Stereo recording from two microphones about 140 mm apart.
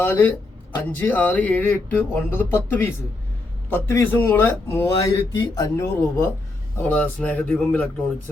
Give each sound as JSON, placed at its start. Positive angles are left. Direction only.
{"t": 0.0, "sound": "speech", "side_deg": 15}